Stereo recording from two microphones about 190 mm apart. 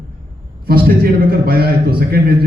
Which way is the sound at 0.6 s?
55° right (ahead or behind).